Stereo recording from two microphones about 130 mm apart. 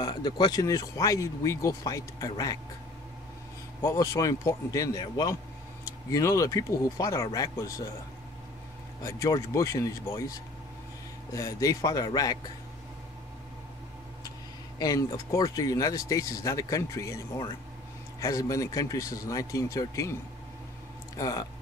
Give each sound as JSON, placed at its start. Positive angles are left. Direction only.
{"t": 0.0, "sound": "speech", "side_deg": 35}
{"t": 3.8, "sound": "speech", "side_deg": 25}
{"t": 9.0, "sound": "speech", "side_deg": 25}
{"t": 14.8, "sound": "speech", "side_deg": 25}
{"t": 21.2, "sound": "speech", "side_deg": 25}